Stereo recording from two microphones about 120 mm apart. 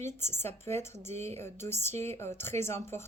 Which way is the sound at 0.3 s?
20° left (ahead or behind).